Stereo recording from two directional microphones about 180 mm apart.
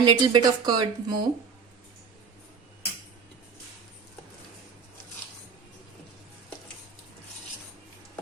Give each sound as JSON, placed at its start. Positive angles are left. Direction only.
{"t": 0.0, "sound": "speech", "side_deg": -25}